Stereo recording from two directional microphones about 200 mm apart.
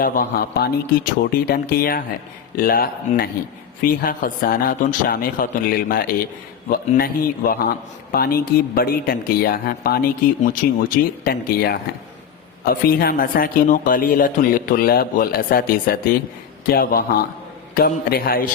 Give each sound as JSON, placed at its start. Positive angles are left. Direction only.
{"t": 0.0, "sound": "speech", "side_deg": 45}